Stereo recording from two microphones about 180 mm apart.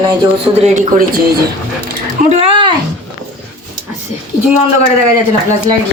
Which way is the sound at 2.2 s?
30° right (ahead or behind).